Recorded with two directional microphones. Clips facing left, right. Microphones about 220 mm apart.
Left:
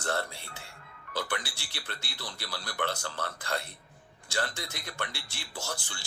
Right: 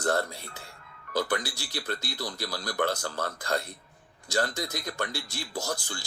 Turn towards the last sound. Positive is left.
turn(degrees=-40)  # may be behind; listen again after turning